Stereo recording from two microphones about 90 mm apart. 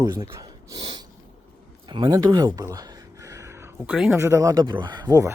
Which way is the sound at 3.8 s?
15° right (ahead or behind).